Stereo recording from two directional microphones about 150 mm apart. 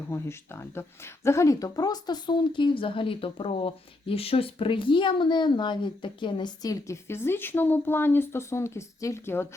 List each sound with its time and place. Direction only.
0.1 s speech: 15° left (ahead or behind)